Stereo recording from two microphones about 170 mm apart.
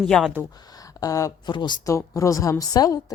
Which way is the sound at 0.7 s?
20° left (ahead or behind).